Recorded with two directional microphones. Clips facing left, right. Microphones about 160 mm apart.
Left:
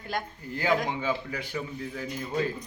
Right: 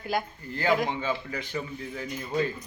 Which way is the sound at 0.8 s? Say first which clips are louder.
Even; 10° left (ahead or behind).